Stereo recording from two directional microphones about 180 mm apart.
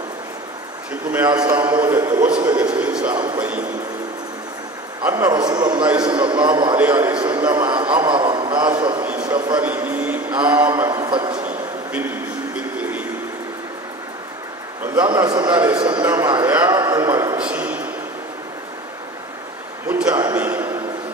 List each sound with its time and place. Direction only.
1.3 s a man's voice: 20° right (ahead or behind)
2.8 s a sound: 5° right (ahead or behind)
3.3 s a man's voice: 10° right (ahead or behind)
5.0 s a man's voice: 10° right (ahead or behind)
5.3 s a man's voice: 20° right (ahead or behind)
6.8 s a man's voice: 10° right (ahead or behind)
7.2 s a man's voice: 25° right (ahead or behind)
9.6 s a man's voice: 10° right (ahead or behind); by 11.3 s 25° right (ahead or behind)
11.9 s a sound: 10° right (ahead or behind)
15.1 s a man's voice: 20° right (ahead or behind)
17.4 s a sound: 5° right (ahead or behind)
19.9 s a man's voice: 10° right (ahead or behind)
20.2 s a sound: 10° right (ahead or behind)